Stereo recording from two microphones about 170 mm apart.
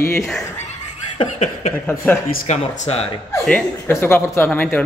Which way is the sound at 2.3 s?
45° left (ahead or behind).